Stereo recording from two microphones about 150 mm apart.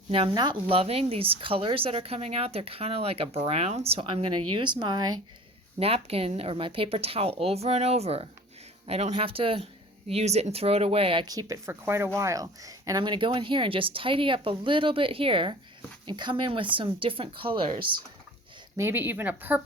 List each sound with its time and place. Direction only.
0.1 s speech: 35° right (ahead or behind)
5.8 s speech: 40° right (ahead or behind)
18.8 s speech: 15° right (ahead or behind)